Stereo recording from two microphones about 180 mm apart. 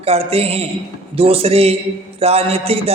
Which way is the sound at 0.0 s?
35° right (ahead or behind).